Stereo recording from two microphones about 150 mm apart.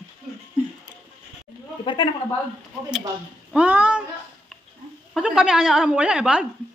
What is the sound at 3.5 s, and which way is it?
Speech, 10° right (ahead or behind).